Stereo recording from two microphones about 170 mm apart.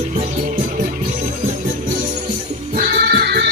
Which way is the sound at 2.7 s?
65° right (ahead or behind).